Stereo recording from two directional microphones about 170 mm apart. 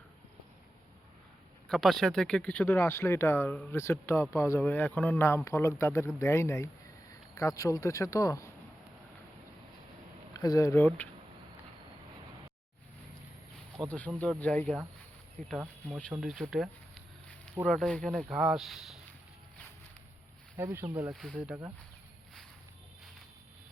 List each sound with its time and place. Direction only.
1.6 s speech: centre (ahead or behind); by 8.5 s 20° left (ahead or behind)
10.3 s speech: 20° left (ahead or behind)
13.8 s speech: centre (ahead or behind)
14.2 s speech: 10° left (ahead or behind)
16.1 s a sound: 5° right (ahead or behind)
17.7 s speech: 5° left (ahead or behind)
20.7 s speech: 15° right (ahead or behind)
21.1 s speech: centre (ahead or behind)